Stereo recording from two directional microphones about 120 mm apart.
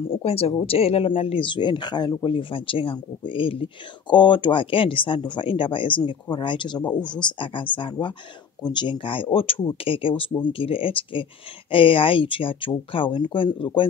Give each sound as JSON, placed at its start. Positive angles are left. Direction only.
{"t": 0.1, "sound": "speech", "side_deg": 55}